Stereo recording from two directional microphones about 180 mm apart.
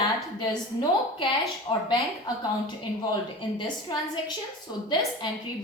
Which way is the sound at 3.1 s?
25° left (ahead or behind).